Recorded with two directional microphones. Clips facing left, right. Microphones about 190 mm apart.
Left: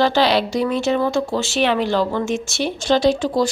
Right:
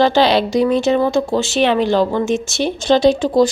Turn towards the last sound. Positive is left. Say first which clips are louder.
# right 4 dB
turn(degrees=-20)  # may be behind; listen again after turning